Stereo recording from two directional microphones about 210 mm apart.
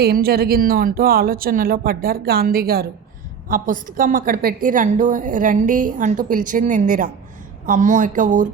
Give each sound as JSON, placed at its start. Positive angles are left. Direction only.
{"t": 0.0, "sound": "a woman's voice", "side_deg": -45}